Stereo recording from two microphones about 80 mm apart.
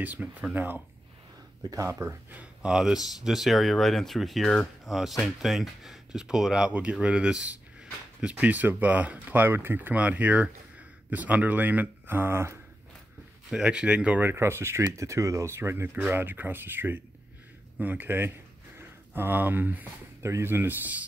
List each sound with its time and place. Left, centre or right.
0.0 s speech: right
1.9 s speech: right
2.6 s speech: centre; by 12.5 s right
13.5 s speech: centre
14.2 s speech: right
20.2 s speech: right